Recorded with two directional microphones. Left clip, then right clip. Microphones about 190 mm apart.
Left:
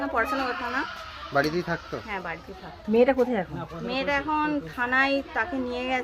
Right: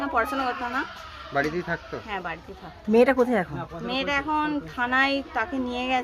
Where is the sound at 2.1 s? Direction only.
10° right (ahead or behind).